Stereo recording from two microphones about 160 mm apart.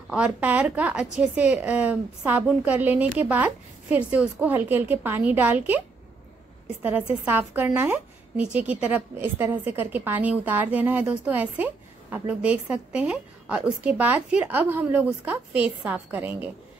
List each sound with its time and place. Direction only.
0.1 s speech: 10° right (ahead or behind)
6.8 s speech: 10° right (ahead or behind)